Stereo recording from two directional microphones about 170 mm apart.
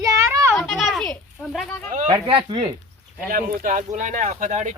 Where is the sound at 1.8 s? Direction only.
50° right (ahead or behind).